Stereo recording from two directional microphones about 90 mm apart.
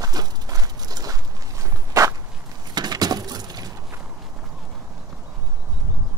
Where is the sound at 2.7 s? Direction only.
50° right (ahead or behind).